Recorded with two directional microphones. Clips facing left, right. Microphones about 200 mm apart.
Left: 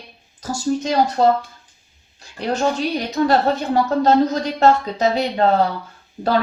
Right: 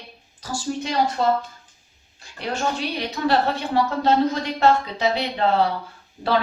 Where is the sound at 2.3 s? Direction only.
40° left (ahead or behind).